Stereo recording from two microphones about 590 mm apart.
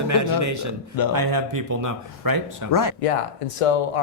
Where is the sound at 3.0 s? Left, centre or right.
Left.